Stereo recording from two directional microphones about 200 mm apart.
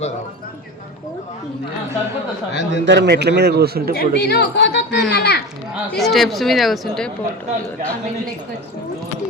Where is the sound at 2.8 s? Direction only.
60° right (ahead or behind).